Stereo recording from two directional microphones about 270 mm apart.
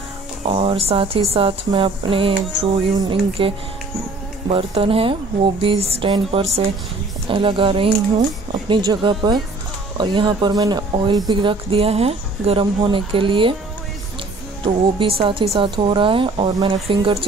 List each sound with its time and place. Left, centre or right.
0.5 s speech: right
14.6 s speech: centre